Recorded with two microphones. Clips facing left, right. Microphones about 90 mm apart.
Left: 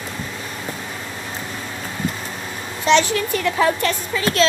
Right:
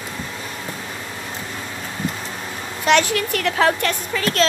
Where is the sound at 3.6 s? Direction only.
65° right (ahead or behind).